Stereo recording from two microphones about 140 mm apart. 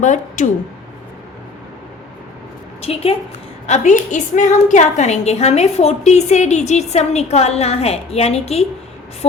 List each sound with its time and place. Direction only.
0.0 s speech: 60° left (ahead or behind)
2.8 s a woman's voice: 45° left (ahead or behind)
3.7 s a woman's voice: 60° left (ahead or behind)